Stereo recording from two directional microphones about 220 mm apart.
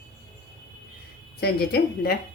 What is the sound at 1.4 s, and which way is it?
Speech, 45° left (ahead or behind).